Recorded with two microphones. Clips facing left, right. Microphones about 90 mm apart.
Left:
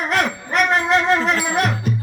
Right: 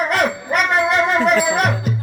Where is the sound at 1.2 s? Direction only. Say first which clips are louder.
Right 3 dB; 5° right (ahead or behind).